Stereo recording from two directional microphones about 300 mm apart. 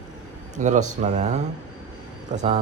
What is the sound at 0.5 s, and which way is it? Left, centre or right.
A man's voice, right.